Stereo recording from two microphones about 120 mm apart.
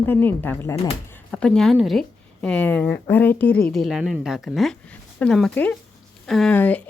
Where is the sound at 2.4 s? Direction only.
10° left (ahead or behind).